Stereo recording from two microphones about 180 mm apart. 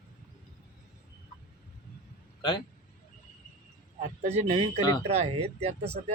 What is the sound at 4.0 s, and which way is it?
Speech, 35° right (ahead or behind).